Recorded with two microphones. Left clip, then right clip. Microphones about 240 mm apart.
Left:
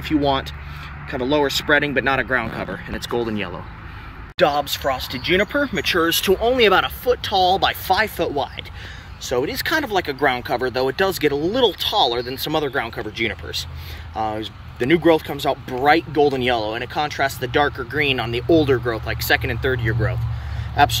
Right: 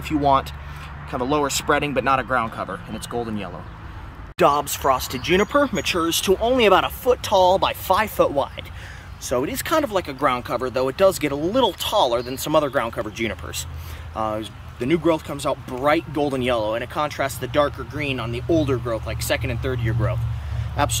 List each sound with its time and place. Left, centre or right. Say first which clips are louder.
1.3 s speech: left 3 dB; centre
4.4 s speech: even; centre